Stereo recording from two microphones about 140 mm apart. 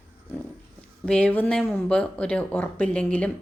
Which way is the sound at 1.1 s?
10° left (ahead or behind).